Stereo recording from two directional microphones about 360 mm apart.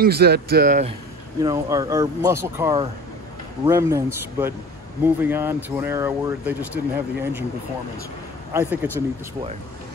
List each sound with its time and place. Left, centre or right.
0.0 s speech: right
1.4 s speech: centre
8.5 s speech: centre